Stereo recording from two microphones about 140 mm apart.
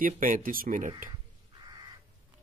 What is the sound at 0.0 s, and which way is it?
Speech, 80° right.